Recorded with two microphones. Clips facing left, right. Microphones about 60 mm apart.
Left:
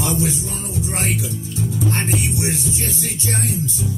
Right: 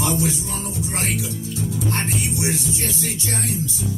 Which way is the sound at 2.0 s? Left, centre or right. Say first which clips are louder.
Left 2 dB; left.